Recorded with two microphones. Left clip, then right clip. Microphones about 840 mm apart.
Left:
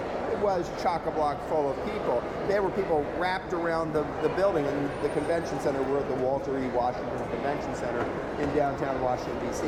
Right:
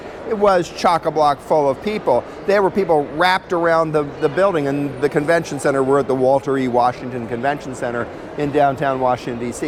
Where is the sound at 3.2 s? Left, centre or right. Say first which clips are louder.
Right 12 dB; right.